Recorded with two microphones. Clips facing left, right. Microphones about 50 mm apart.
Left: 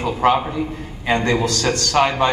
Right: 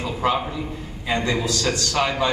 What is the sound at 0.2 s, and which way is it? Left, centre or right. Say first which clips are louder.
A man's voice: left 6 dB; left.